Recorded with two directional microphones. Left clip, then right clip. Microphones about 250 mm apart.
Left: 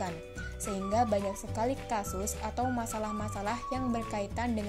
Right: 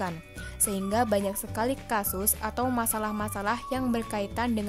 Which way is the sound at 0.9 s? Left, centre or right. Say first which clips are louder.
Right 3 dB; centre.